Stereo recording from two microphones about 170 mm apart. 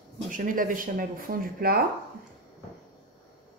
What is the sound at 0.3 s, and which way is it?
Speech, 50° right (ahead or behind).